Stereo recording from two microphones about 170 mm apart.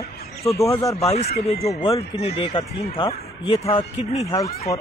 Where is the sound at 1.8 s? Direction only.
30° left (ahead or behind).